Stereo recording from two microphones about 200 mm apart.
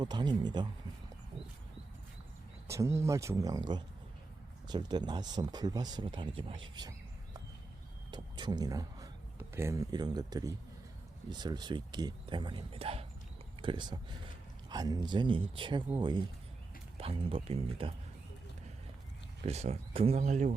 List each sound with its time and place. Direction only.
0.0 s speech: 20° right (ahead or behind)
2.6 s speech: 15° right (ahead or behind)
8.1 s speech: 20° right (ahead or behind)
19.5 s speech: 30° right (ahead or behind)